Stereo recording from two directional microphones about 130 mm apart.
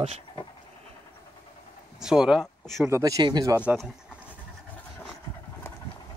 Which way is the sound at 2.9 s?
25° right (ahead or behind).